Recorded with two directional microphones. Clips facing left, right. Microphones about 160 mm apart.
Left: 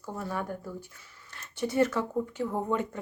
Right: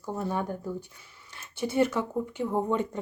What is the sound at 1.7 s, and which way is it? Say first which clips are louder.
Speech: right 1 dB; 15° right (ahead or behind).